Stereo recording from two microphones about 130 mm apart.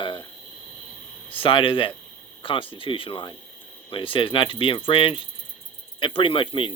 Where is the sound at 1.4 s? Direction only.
40° left (ahead or behind).